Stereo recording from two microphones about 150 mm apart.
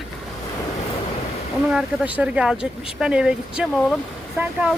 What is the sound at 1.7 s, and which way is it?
Speech, 5° right (ahead or behind).